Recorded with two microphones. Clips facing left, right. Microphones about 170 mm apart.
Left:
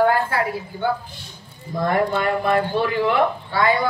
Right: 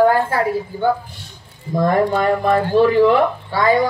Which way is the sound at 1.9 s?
40° right (ahead or behind).